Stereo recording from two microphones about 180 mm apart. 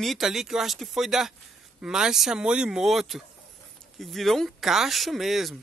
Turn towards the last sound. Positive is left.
turn(degrees=0)  # may be behind; listen again after turning